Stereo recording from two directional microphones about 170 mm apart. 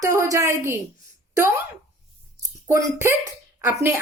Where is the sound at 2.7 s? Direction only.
15° right (ahead or behind).